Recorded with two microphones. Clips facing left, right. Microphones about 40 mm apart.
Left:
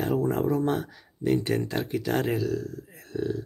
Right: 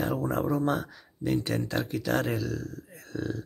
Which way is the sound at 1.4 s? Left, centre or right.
Left.